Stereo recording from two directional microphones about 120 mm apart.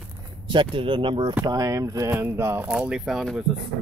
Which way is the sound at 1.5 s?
30° right (ahead or behind).